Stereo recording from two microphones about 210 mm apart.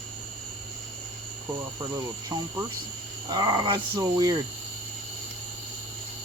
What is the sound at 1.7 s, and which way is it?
Speech, 15° right (ahead or behind).